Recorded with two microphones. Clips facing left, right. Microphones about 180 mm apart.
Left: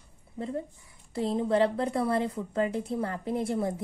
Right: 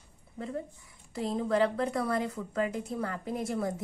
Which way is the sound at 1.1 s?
30° left (ahead or behind).